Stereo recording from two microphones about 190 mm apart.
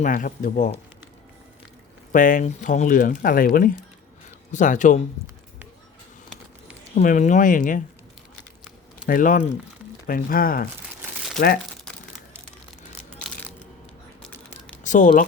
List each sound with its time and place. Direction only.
0.0 s speech: 45° left (ahead or behind)
2.1 s speech: 45° left (ahead or behind)
6.9 s speech: 40° left (ahead or behind)
9.0 s speech: 45° left (ahead or behind)
13.1 s crushing: 5° left (ahead or behind)
14.8 s speech: 40° left (ahead or behind)